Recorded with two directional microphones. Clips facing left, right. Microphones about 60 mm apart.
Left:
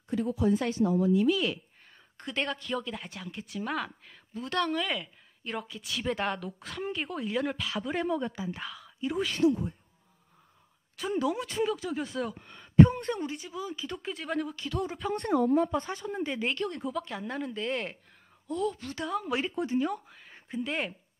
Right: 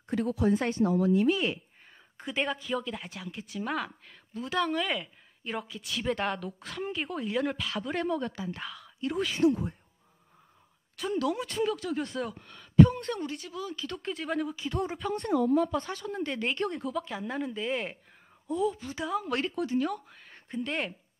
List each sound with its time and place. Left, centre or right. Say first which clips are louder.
0.1 s speech: even; right
2.1 s speech: right 1 dB; centre
11.2 s speech: even; centre
14.7 s speech: right 1 dB; right
15.1 s speech: even; left
16.0 s speech: even; centre
19.2 s speech: even; centre